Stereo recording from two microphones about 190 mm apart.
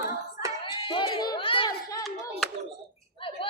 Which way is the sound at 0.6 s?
25° left (ahead or behind).